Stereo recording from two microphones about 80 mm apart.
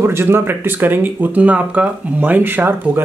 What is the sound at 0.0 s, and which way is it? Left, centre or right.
Speech, right.